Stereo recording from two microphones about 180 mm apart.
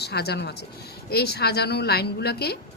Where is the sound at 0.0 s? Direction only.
65° left (ahead or behind).